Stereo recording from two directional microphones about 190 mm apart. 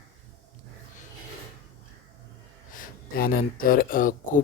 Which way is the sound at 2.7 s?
50° left (ahead or behind).